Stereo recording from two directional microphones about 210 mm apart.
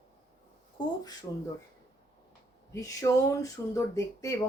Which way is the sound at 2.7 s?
15° left (ahead or behind).